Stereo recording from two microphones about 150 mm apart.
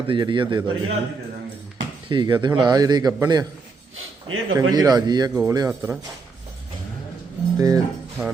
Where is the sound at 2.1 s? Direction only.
30° right (ahead or behind).